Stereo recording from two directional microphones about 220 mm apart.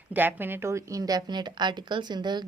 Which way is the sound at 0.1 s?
10° right (ahead or behind).